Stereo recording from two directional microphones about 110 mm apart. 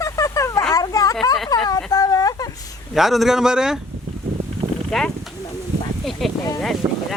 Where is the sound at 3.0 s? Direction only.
Centre (ahead or behind).